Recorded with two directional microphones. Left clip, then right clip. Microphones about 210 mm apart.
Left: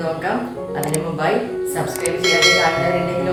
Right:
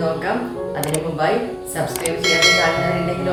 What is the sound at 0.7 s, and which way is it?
Music, centre (ahead or behind).